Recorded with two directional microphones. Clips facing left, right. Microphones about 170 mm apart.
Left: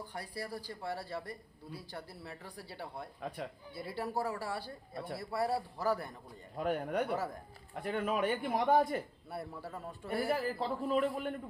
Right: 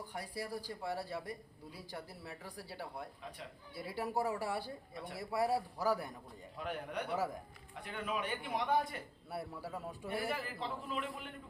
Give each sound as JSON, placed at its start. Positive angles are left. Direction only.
{"t": 0.1, "sound": "speech", "side_deg": -10}
{"t": 6.6, "sound": "a man's voice", "side_deg": 45}
{"t": 9.3, "sound": "speech", "side_deg": -5}
{"t": 10.1, "sound": "a man's voice", "side_deg": 40}